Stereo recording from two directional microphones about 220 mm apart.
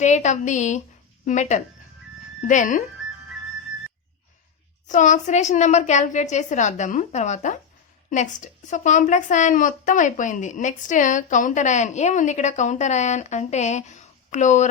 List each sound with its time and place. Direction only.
0.0 s a woman's voice: 30° left (ahead or behind)
4.9 s a woman's voice: 35° left (ahead or behind)